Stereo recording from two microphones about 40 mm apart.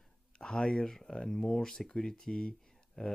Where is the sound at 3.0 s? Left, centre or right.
Left.